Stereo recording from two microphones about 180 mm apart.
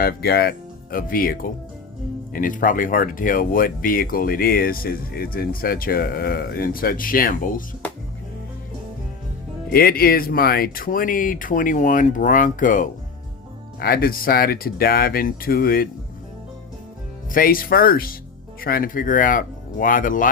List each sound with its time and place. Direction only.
0.0 s speech: 60° left (ahead or behind)
9.6 s speech: 55° left (ahead or behind)
17.3 s speech: 50° left (ahead or behind)